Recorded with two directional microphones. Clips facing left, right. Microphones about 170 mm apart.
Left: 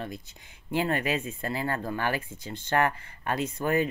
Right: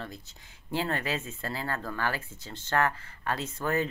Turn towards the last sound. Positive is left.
turn(degrees=15)  # may be behind; listen again after turning